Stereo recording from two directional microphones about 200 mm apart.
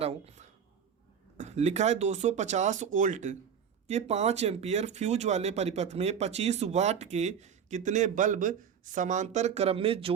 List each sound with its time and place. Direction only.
0.0 s speech: 30° right (ahead or behind)